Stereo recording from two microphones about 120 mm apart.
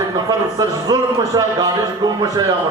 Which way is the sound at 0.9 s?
30° right (ahead or behind).